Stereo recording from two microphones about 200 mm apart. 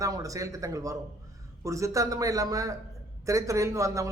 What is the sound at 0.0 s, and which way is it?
A man's voice, 15° right (ahead or behind).